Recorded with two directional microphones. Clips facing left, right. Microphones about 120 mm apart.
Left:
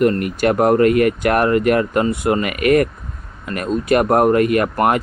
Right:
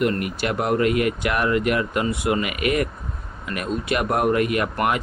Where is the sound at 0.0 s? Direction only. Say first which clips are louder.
Left 7 dB; 45° left (ahead or behind).